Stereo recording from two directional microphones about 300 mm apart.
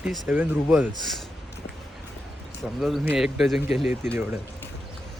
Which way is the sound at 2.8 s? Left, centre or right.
Centre.